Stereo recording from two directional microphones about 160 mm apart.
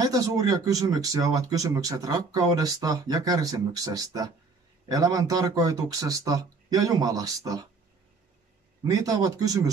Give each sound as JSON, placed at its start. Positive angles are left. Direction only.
{"t": 0.0, "sound": "speech", "side_deg": -20}
{"t": 8.8, "sound": "speech", "side_deg": -20}